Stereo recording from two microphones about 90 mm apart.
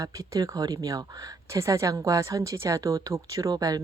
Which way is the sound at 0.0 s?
40° right (ahead or behind).